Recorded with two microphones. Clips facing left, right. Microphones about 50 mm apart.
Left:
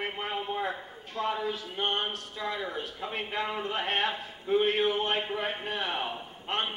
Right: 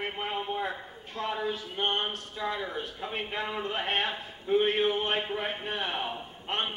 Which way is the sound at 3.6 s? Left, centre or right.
Centre.